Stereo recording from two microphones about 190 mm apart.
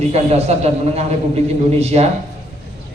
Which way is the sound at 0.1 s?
35° right (ahead or behind).